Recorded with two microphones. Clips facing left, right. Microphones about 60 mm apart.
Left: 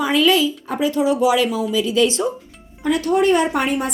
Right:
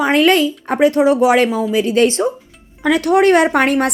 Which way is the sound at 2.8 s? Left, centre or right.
Right.